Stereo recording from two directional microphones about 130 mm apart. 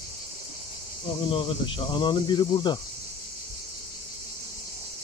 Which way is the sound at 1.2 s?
40° left (ahead or behind).